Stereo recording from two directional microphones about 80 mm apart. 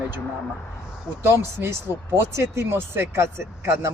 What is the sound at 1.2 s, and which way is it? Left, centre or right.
A man's voice, right.